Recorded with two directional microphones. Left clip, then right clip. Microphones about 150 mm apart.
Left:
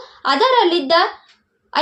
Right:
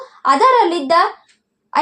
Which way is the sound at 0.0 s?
20° right (ahead or behind).